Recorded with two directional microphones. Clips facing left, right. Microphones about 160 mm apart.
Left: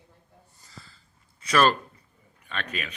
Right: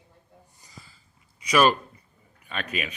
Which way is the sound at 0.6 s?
15° right (ahead or behind).